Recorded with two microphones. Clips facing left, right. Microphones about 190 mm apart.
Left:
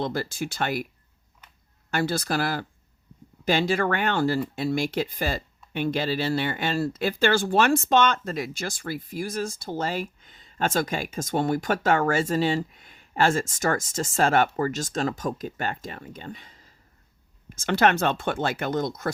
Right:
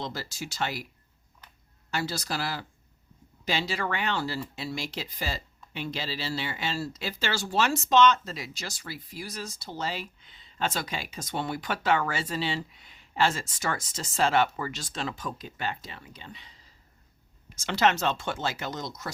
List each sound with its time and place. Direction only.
0.0 s speech: 55° left (ahead or behind)
1.9 s speech: 55° left (ahead or behind)